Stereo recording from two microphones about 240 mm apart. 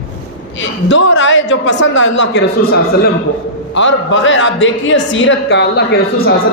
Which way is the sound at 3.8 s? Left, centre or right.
Left.